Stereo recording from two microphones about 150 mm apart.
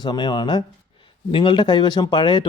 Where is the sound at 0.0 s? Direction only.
30° left (ahead or behind).